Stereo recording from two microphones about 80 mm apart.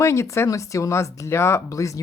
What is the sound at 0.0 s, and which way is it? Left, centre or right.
Speech, left.